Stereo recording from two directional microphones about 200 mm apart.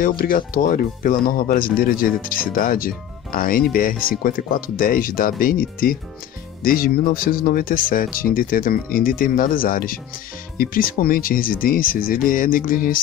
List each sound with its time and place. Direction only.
0.2 s speech: 45° left (ahead or behind)